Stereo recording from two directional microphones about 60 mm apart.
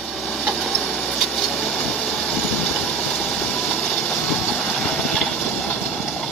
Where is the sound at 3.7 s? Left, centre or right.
Centre.